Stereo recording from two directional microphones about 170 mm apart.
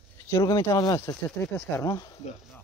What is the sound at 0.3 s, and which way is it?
Speech, 20° left (ahead or behind).